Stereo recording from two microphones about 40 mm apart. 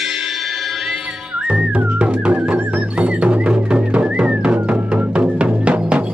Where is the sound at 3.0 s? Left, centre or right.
Right.